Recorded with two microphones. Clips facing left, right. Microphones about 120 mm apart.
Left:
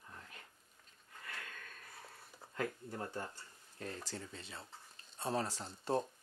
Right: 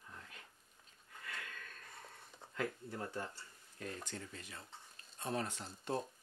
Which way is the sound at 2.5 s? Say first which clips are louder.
Left 1 dB; 25° left (ahead or behind).